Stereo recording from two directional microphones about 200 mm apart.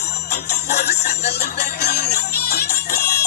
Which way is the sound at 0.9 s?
55° left (ahead or behind).